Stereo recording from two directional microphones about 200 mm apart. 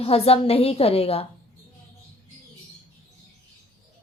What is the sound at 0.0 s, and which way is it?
A woman's voice, 30° left (ahead or behind).